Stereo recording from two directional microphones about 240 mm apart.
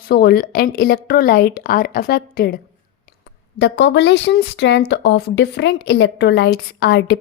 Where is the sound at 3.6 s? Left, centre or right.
Left.